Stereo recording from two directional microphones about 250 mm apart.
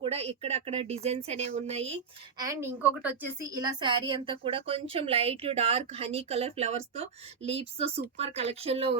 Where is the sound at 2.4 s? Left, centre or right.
Centre.